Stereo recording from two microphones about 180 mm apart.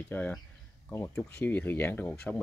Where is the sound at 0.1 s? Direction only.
10° left (ahead or behind).